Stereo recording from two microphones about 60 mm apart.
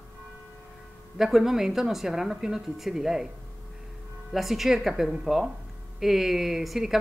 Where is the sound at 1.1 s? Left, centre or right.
Centre.